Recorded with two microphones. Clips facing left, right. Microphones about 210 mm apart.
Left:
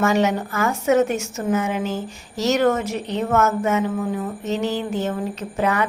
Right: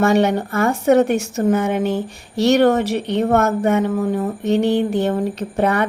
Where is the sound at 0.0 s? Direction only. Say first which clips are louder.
Right 4 dB; 60° right (ahead or behind).